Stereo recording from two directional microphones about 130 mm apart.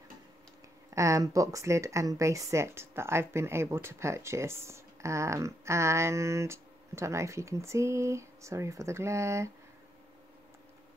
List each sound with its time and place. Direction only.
0.8 s speech: 25° right (ahead or behind)